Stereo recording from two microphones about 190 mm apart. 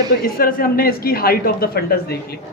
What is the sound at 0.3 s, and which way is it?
A woman's voice, 50° left (ahead or behind).